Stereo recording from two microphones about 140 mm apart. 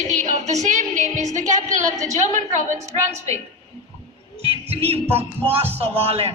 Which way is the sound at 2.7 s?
20° right (ahead or behind).